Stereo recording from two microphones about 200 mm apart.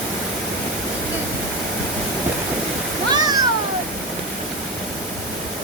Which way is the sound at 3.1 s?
20° right (ahead or behind).